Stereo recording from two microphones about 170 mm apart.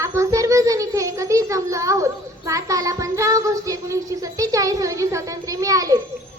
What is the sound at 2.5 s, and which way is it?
Child singing, 20° right (ahead or behind).